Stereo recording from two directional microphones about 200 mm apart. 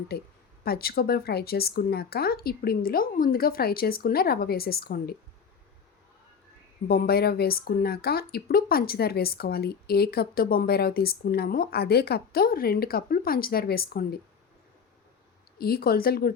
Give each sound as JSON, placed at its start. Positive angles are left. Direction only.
{"t": 0.6, "sound": "a woman's voice", "side_deg": 50}
{"t": 6.8, "sound": "a woman's voice", "side_deg": 45}
{"t": 15.5, "sound": "a woman's voice", "side_deg": 50}